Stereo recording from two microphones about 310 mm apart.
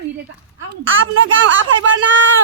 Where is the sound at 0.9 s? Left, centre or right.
Right.